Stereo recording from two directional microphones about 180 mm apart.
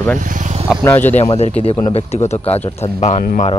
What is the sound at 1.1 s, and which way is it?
Speech, 35° left (ahead or behind).